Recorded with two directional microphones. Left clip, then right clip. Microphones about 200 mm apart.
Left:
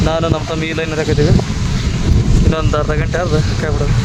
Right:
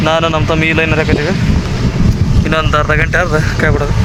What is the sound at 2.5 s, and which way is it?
Speech, centre (ahead or behind).